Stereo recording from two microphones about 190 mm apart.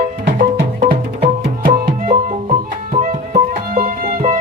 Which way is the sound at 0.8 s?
30° right (ahead or behind).